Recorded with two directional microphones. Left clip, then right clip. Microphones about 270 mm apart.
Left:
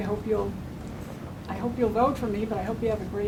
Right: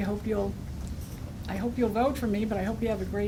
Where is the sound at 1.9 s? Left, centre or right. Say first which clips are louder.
Left 3 dB; right.